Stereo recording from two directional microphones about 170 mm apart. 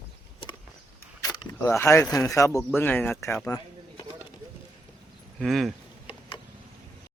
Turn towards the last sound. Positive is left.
turn(degrees=0)  # may be behind; listen again after turning